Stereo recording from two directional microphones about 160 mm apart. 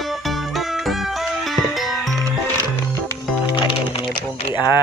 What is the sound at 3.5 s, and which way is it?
Music, 30° left (ahead or behind).